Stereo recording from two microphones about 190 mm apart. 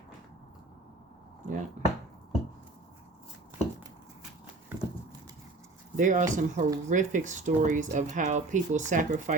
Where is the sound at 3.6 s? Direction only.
35° left (ahead or behind).